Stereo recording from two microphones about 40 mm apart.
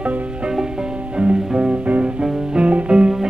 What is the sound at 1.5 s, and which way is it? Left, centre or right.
Music, right.